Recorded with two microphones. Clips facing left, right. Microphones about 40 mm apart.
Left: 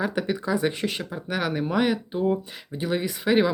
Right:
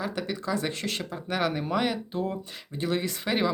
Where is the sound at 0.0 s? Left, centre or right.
Centre.